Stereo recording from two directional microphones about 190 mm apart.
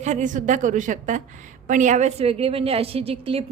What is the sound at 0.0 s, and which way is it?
A woman's voice, 40° right (ahead or behind).